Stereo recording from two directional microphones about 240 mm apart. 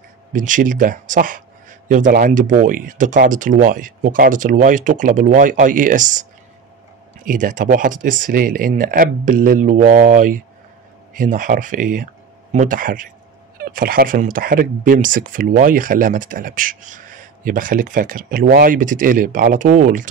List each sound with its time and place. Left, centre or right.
0.3 s speech: right
7.2 s speech: right